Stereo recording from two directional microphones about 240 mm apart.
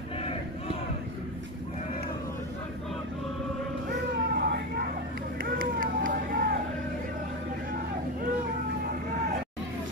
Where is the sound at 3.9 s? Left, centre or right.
Right.